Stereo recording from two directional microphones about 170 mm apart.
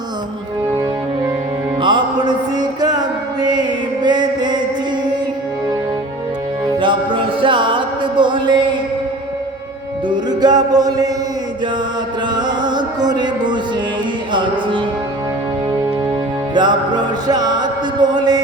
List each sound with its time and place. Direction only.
1.8 s music: 25° right (ahead or behind)
6.7 s music: 30° right (ahead or behind)
10.1 s music: 25° right (ahead or behind)
12.3 s music: 25° right (ahead or behind)
16.6 s music: 25° right (ahead or behind)